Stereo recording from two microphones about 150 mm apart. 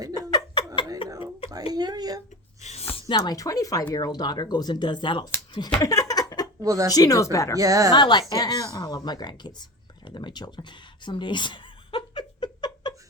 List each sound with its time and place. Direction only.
0.2 s chuckle: 25° left (ahead or behind)
1.7 s a sound: 25° right (ahead or behind)
2.6 s a sound: 50° left (ahead or behind)
2.9 s speech: 30° left (ahead or behind)
6.6 s speech: 20° right (ahead or behind)
6.9 s speech: 25° left (ahead or behind)
7.6 s speech: 20° right (ahead or behind)
7.9 s speech: 30° left (ahead or behind)